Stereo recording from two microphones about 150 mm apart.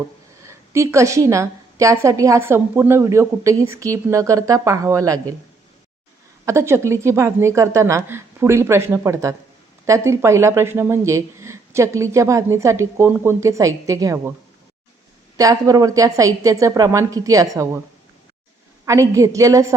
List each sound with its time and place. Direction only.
0.4 s a woman's voice: 20° right (ahead or behind)
6.4 s a woman's voice: 20° right (ahead or behind)
15.4 s a woman's voice: 25° right (ahead or behind)
18.9 s a woman's voice: 20° right (ahead or behind)